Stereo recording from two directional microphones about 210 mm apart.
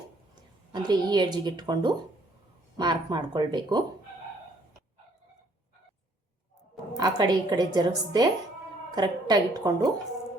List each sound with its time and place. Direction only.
0.7 s speech: 20° right (ahead or behind)
6.9 s speech: 20° right (ahead or behind)